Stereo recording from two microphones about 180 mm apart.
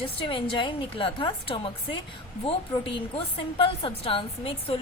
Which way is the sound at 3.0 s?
30° left (ahead or behind).